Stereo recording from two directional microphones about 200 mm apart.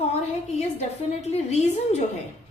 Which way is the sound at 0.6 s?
35° left (ahead or behind).